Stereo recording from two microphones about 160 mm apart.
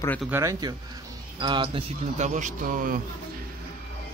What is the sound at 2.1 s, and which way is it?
Speech, 50° right (ahead or behind).